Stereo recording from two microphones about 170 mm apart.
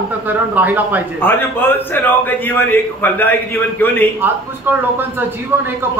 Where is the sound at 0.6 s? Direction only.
10° right (ahead or behind).